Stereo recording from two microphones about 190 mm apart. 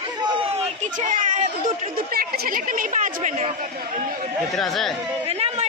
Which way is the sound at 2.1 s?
55° right (ahead or behind).